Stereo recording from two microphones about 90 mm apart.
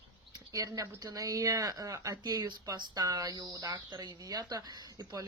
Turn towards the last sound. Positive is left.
turn(degrees=-50)  # may be behind; listen again after turning